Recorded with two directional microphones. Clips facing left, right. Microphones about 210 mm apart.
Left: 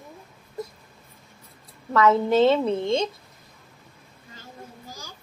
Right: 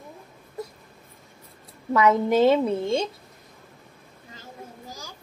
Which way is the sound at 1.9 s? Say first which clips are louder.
Even; 15° right (ahead or behind).